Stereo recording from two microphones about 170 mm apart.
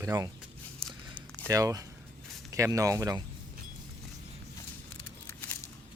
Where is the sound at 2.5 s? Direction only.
20° right (ahead or behind).